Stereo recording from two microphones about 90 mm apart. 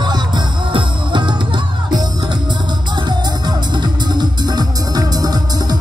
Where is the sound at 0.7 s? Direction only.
60° right (ahead or behind).